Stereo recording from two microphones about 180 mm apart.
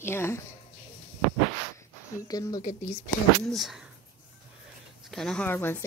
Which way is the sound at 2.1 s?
20° left (ahead or behind).